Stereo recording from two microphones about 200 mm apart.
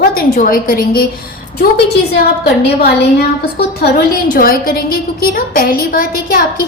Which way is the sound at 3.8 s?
50° left (ahead or behind).